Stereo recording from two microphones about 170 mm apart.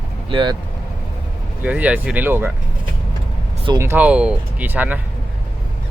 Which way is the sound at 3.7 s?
15° right (ahead or behind).